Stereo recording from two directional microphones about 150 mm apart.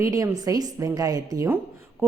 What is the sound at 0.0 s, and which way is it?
A woman's voice, 25° right (ahead or behind).